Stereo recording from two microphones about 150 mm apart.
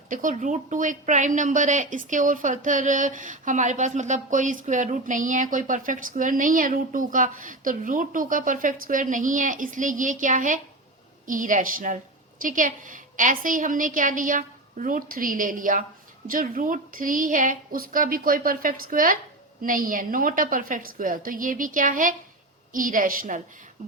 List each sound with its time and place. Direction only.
0.1 s a woman's voice: 60° right (ahead or behind)